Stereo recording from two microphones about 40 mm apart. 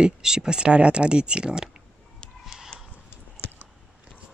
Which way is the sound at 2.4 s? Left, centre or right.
Centre.